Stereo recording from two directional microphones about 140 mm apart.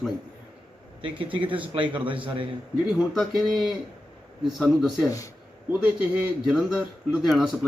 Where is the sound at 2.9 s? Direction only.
Centre (ahead or behind).